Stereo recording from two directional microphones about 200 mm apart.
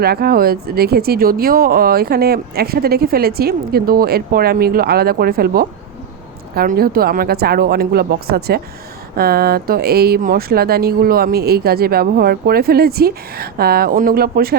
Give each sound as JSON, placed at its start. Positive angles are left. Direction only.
{"t": 0.0, "sound": "speech", "side_deg": -50}